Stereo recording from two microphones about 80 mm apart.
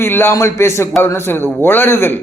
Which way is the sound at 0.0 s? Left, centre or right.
Left.